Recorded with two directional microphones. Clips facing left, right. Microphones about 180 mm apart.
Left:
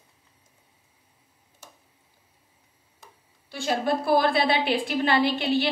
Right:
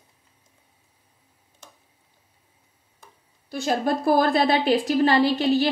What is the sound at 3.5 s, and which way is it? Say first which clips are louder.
A woman's voice: right 2 dB; 45° right (ahead or behind).